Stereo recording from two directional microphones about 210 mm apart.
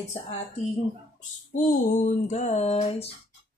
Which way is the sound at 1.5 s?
40° left (ahead or behind).